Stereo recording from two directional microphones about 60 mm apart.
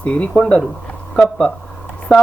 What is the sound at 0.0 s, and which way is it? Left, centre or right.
Speech, left.